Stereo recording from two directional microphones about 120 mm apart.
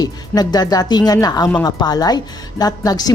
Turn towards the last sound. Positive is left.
turn(degrees=30)  # may be behind; listen again after turning